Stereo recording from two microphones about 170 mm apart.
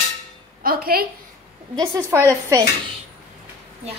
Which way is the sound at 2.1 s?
15° right (ahead or behind).